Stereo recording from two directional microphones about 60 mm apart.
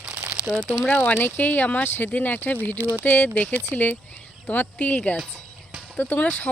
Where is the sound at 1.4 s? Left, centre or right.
Left.